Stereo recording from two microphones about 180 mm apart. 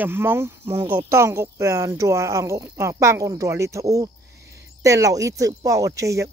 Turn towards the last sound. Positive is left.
turn(degrees=-15)  # may be behind; listen again after turning